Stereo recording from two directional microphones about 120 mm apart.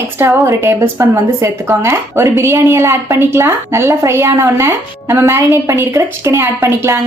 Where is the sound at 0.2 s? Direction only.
25° right (ahead or behind).